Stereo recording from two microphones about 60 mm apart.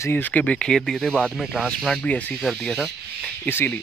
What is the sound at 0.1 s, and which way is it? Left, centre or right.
Speech, left.